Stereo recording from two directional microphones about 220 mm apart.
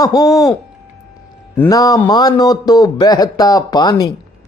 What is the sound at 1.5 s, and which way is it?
A man's voice, 15° left (ahead or behind).